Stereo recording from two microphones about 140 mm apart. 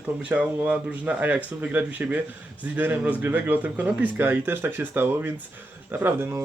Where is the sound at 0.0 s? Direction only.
10° right (ahead or behind).